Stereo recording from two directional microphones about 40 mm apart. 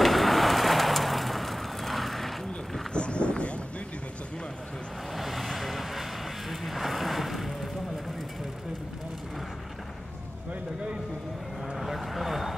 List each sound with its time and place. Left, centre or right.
0.0 s vehicle: centre
2.9 s a sound: left
5.1 s vehicle: centre
11.7 s vehicle: centre